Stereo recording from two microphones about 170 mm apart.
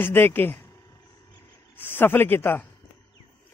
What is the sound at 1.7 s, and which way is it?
Speech, 10° left (ahead or behind).